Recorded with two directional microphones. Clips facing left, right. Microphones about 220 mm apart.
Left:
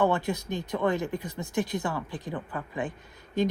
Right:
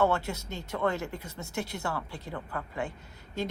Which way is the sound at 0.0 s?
15° left (ahead or behind).